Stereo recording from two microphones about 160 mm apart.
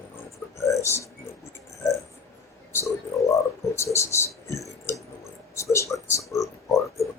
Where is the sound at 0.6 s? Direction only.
20° left (ahead or behind).